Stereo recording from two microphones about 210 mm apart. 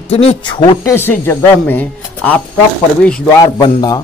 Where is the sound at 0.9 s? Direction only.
10° left (ahead or behind).